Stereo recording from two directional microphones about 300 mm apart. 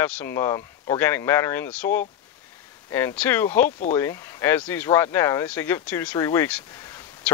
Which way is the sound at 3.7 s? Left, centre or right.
Left.